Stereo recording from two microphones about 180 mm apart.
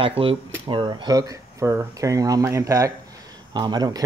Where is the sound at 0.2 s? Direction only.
30° right (ahead or behind).